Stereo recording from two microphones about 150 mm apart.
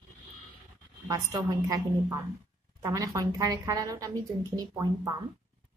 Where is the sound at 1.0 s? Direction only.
25° right (ahead or behind).